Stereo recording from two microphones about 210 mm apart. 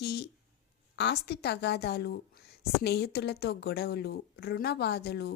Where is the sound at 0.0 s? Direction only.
50° left (ahead or behind).